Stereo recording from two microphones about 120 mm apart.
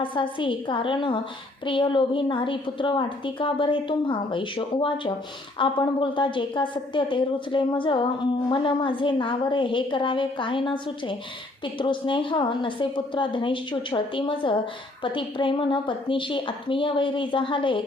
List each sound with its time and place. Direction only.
0.0 s a woman's voice: 45° left (ahead or behind)